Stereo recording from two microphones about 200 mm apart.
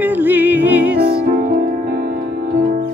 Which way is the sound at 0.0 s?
10° right (ahead or behind).